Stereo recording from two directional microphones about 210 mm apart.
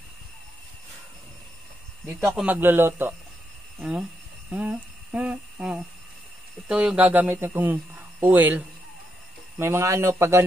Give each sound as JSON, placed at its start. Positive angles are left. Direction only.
{"t": 2.2, "sound": "speech", "side_deg": -5}
{"t": 4.5, "sound": "humming", "side_deg": -5}
{"t": 6.7, "sound": "speech", "side_deg": -5}